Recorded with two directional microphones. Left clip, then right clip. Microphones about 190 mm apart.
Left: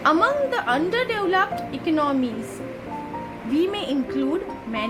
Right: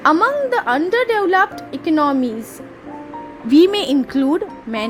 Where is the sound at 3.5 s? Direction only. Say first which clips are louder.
Right 10 dB; 45° right (ahead or behind).